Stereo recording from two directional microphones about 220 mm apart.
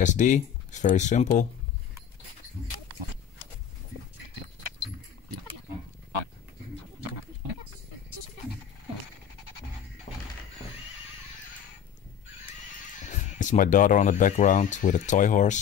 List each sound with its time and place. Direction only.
0.0 s speech: 35° left (ahead or behind)
13.1 s speech: 35° left (ahead or behind)